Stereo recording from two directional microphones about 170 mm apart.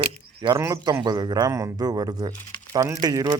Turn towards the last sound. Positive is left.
turn(degrees=-20)  # may be behind; listen again after turning